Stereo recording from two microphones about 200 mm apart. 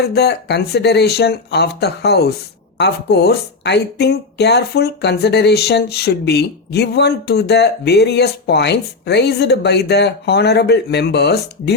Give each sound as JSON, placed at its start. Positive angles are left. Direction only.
{"t": 0.0, "sound": "speech", "side_deg": 55}